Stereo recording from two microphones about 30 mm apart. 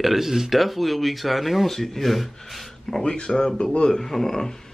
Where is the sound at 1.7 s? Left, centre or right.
Centre.